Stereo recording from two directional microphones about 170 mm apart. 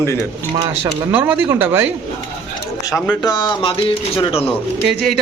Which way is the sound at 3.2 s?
25° left (ahead or behind).